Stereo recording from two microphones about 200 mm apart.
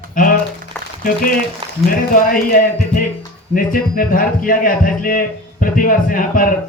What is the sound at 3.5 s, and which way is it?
A man's voice, 45° left (ahead or behind).